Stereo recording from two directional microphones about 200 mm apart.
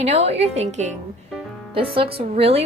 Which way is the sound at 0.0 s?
30° right (ahead or behind).